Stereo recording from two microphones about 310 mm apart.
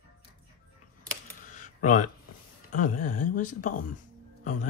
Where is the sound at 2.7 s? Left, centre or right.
Left.